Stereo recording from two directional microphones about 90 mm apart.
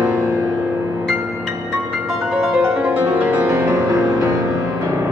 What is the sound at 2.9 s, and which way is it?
Music, 20° right (ahead or behind).